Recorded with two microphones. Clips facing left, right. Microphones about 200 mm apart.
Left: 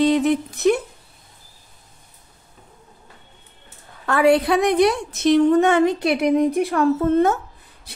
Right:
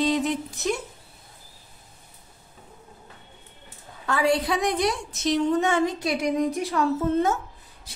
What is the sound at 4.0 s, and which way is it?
A woman's voice, 60° left (ahead or behind).